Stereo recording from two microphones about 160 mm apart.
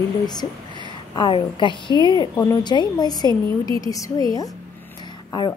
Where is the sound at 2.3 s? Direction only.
15° left (ahead or behind).